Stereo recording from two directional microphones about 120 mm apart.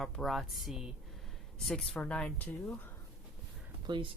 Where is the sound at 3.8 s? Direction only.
40° right (ahead or behind).